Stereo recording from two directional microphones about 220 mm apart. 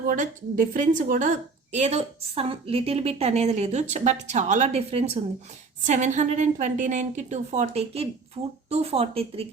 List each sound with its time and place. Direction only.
0.1 s a woman's voice: 40° right (ahead or behind)